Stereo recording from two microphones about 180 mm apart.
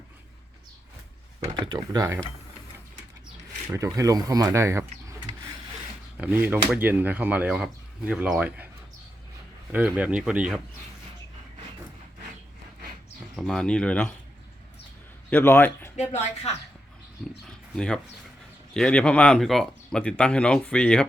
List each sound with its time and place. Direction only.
1.5 s speech: 25° right (ahead or behind)
3.7 s speech: 15° right (ahead or behind)
6.1 s speech: 10° right (ahead or behind)
9.7 s speech: 5° right (ahead or behind)
13.3 s speech: centre (ahead or behind)
15.3 s a man's voice: 10° left (ahead or behind)
16.0 s speech: 40° left (ahead or behind)
17.7 s speech: 5° left (ahead or behind)